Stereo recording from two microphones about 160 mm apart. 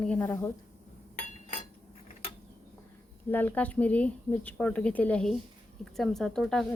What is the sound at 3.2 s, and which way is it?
Speech, 10° left (ahead or behind).